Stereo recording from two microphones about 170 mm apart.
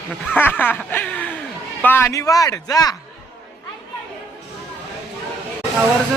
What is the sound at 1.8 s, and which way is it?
A man's voice, 15° left (ahead or behind).